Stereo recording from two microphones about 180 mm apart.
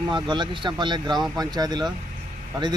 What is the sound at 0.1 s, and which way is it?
Speech, 25° right (ahead or behind).